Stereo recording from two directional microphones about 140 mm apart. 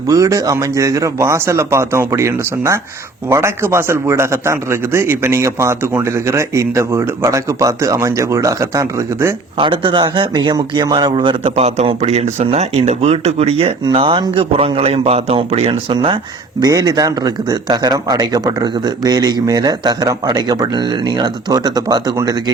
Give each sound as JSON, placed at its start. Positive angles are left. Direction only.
{"t": 0.1, "sound": "a man's voice", "side_deg": -25}
{"t": 9.6, "sound": "a man's voice", "side_deg": -35}
{"t": 16.6, "sound": "a man's voice", "side_deg": -25}